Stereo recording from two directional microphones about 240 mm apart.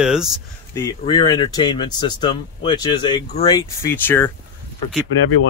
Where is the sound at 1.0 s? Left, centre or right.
Centre.